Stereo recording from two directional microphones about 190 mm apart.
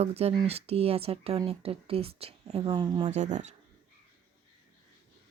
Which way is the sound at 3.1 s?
40° right (ahead or behind).